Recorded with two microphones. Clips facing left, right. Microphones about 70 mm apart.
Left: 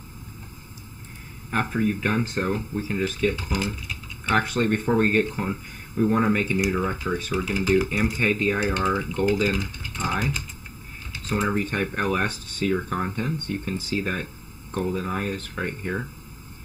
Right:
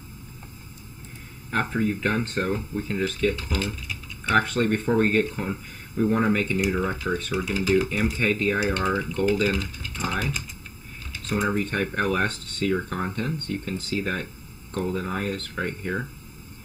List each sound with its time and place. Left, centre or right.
1.5 s speech: centre
11.7 s speech: centre